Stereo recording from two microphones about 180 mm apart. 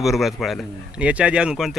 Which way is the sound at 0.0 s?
Centre (ahead or behind).